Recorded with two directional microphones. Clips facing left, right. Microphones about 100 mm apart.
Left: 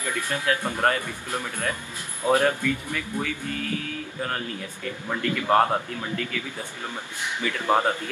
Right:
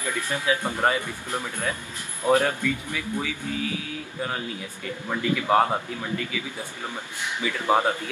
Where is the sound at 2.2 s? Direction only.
15° left (ahead or behind).